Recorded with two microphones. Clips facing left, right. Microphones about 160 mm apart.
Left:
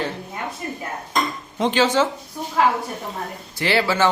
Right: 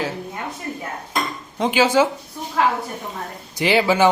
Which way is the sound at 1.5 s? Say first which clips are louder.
Right 2 dB; 5° right (ahead or behind).